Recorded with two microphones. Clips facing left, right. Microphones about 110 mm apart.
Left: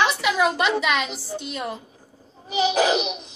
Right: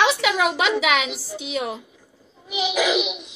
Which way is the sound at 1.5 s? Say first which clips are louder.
Right 5 dB; 90° right.